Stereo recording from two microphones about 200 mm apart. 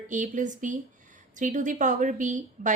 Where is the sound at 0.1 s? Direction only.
40° right (ahead or behind).